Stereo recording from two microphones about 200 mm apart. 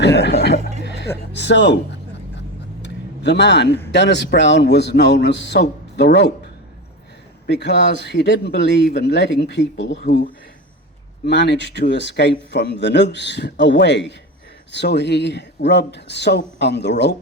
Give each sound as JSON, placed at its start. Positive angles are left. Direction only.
{"t": 0.0, "sound": "chuckle", "side_deg": 60}
{"t": 0.8, "sound": "music", "side_deg": 60}
{"t": 1.3, "sound": "speech", "side_deg": 60}
{"t": 3.2, "sound": "a man's voice", "side_deg": 60}
{"t": 7.4, "sound": "a man's voice", "side_deg": 60}
{"t": 11.3, "sound": "a man's voice", "side_deg": 60}